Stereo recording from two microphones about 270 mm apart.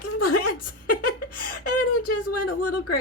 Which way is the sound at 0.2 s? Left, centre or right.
Left.